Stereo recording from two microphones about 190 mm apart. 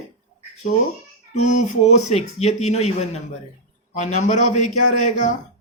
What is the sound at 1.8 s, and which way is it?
A man's voice, 35° left (ahead or behind).